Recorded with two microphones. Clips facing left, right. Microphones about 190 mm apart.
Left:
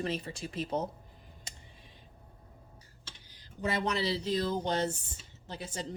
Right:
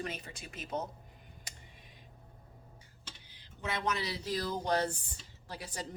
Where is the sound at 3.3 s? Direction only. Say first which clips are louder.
Left 5 dB; 40° left (ahead or behind); by 5.9 s 25° left (ahead or behind).